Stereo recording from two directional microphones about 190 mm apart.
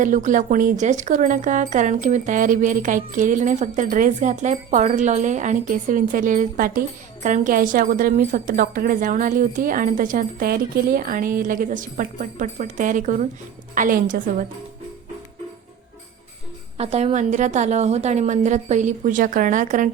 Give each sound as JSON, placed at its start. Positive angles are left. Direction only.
{"t": 0.0, "sound": "speech", "side_deg": -40}
{"t": 16.7, "sound": "a woman's voice", "side_deg": -35}